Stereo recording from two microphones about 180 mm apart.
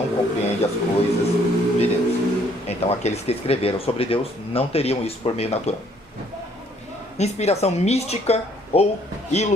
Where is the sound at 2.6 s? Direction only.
35° left (ahead or behind).